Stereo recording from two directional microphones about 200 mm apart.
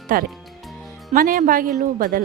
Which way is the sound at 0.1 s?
45° right (ahead or behind).